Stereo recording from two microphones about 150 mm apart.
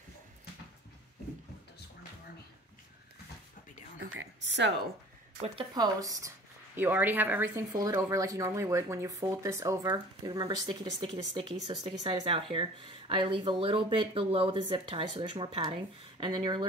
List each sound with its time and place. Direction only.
5.8 s speech: 25° right (ahead or behind)
6.8 s speech: 15° right (ahead or behind); by 16.6 s 30° right (ahead or behind)